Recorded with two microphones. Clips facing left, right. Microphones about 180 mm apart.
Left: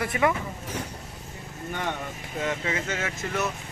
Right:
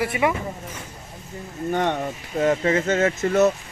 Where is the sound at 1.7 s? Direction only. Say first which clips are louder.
Right 9 dB; 45° right (ahead or behind).